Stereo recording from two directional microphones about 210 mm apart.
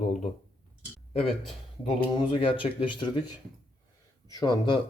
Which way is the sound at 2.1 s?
25° left (ahead or behind).